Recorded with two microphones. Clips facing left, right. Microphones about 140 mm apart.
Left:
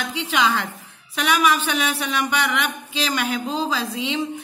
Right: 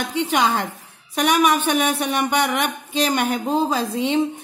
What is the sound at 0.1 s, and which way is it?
A woman's voice, 45° right (ahead or behind).